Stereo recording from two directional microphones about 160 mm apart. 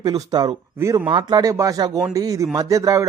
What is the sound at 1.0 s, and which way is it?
Speech, 30° right (ahead or behind).